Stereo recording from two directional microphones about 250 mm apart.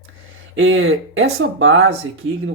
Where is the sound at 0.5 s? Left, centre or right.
Right.